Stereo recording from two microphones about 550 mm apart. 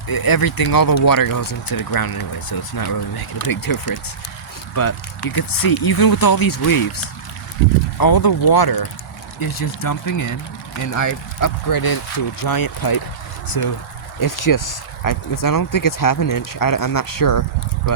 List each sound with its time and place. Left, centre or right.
0.1 s speech: left